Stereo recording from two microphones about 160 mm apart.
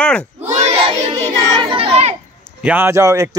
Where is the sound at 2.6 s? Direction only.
10° right (ahead or behind).